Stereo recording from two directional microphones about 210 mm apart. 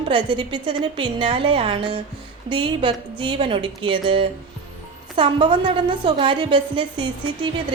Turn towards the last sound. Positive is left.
turn(degrees=-25)  # may be behind; listen again after turning